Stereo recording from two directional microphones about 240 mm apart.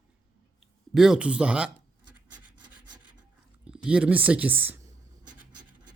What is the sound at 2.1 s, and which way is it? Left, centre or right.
Rub, right.